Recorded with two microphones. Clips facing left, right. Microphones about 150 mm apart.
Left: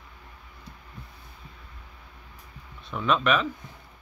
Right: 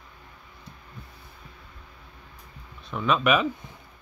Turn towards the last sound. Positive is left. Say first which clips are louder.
# right 1 dB
turn(degrees=-10)  # may be behind; listen again after turning